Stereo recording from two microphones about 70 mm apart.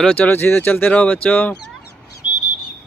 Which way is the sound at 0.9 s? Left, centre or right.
Centre.